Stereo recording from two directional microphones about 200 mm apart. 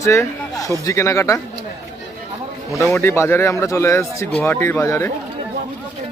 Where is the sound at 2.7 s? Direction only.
10° left (ahead or behind).